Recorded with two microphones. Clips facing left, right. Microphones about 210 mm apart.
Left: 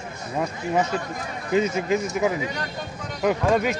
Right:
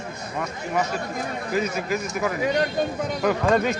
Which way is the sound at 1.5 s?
25° left (ahead or behind).